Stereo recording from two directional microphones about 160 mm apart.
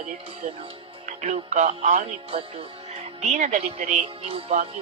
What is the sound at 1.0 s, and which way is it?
Speech, 50° right (ahead or behind).